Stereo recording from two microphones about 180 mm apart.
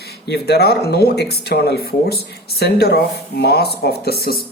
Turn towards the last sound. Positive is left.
turn(degrees=60)  # may be behind; listen again after turning